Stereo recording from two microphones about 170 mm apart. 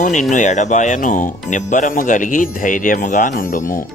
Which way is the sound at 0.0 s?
45° left (ahead or behind).